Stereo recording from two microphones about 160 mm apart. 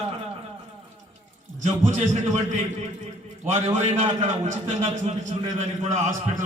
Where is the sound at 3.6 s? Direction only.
45° right (ahead or behind).